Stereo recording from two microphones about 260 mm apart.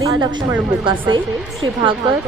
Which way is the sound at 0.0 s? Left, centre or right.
Centre.